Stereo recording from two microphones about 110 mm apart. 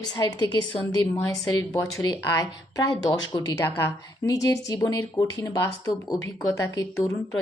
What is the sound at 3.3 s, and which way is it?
Speech, 45° left (ahead or behind).